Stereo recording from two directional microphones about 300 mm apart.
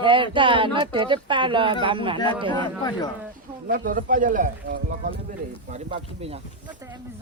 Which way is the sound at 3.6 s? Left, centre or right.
Right.